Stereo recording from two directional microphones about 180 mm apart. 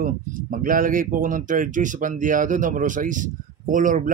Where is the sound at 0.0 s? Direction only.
50° right (ahead or behind).